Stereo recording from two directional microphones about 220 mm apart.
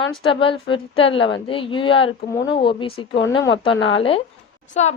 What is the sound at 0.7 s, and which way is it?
A woman's voice, 25° left (ahead or behind).